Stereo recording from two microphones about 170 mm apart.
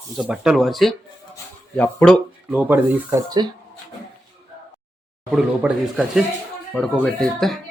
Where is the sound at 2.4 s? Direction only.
10° right (ahead or behind).